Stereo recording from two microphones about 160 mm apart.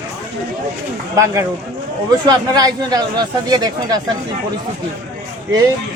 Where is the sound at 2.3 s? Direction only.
25° right (ahead or behind).